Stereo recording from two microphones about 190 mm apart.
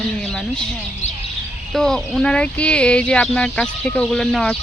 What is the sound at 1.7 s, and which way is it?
Speech, centre (ahead or behind).